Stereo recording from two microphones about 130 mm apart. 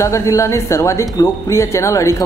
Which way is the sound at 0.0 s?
25° left (ahead or behind).